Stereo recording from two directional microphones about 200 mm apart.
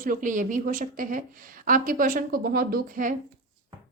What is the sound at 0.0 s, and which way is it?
Speech, 40° right (ahead or behind).